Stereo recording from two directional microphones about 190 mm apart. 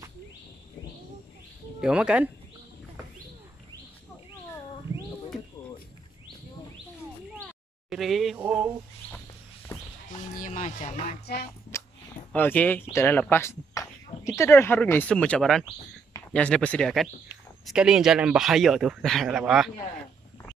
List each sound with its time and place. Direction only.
1.8 s speech: 5° right (ahead or behind)
7.9 s speech: centre (ahead or behind)
10.3 s speech: 45° left (ahead or behind)
11.7 s a sound: 15° left (ahead or behind)
12.3 s speech: 10° left (ahead or behind)